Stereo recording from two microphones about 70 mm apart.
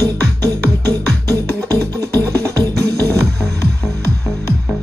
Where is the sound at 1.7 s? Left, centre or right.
Right.